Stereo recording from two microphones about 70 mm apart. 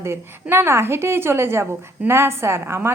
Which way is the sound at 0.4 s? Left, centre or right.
Right.